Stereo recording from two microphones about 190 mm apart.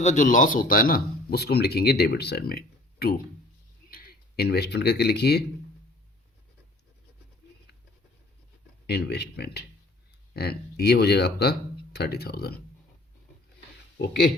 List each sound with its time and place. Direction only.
0.0 s speech: 40° left (ahead or behind); by 5.5 s 60° left (ahead or behind)
8.9 s speech: 60° left (ahead or behind)